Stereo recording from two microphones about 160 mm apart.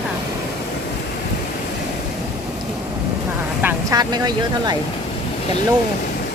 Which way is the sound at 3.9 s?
25° right (ahead or behind).